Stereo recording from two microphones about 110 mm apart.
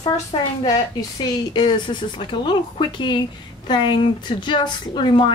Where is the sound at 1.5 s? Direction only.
45° left (ahead or behind).